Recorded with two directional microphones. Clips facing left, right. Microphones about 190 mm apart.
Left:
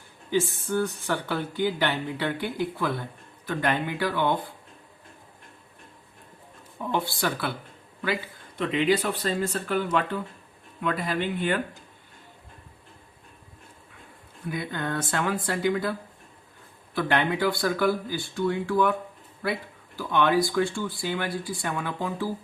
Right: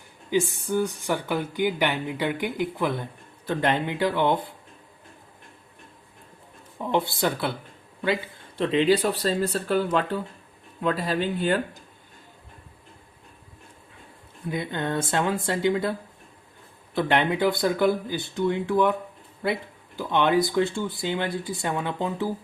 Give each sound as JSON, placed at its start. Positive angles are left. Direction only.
{"t": 0.3, "sound": "speech", "side_deg": -15}
{"t": 6.9, "sound": "speech", "side_deg": -20}
{"t": 14.5, "sound": "speech", "side_deg": -25}
{"t": 20.0, "sound": "speech", "side_deg": -20}